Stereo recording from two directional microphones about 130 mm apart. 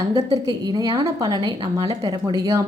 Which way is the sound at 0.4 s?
30° right (ahead or behind).